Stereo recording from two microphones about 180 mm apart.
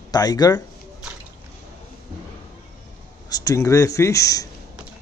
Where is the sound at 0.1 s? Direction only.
20° left (ahead or behind).